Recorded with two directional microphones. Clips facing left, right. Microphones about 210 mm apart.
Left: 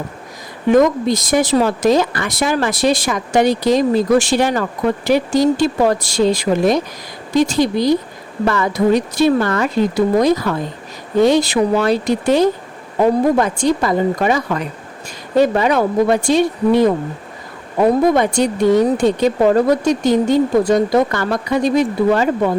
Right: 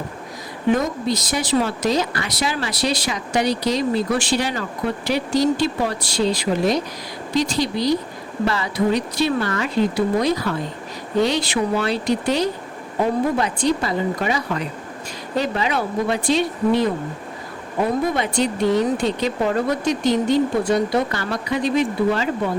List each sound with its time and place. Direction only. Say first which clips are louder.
1.0 s speech: left 7 dB; 45° left (ahead or behind)
18.1 s speech: left 6 dB; 50° left (ahead or behind)